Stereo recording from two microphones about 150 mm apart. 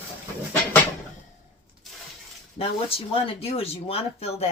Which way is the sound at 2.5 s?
40° left (ahead or behind).